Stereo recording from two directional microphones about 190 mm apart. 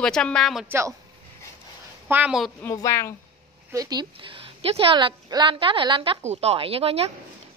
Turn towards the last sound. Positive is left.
turn(degrees=-30)  # may be behind; listen again after turning